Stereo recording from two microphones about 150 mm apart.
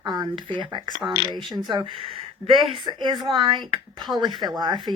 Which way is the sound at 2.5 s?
30° right (ahead or behind).